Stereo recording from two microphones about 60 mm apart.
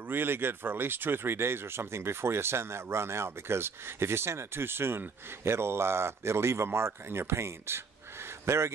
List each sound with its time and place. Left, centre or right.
0.1 s speech: right